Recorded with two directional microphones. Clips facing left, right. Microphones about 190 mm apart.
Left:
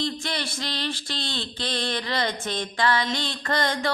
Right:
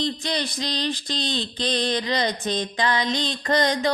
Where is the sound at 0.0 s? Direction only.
20° right (ahead or behind).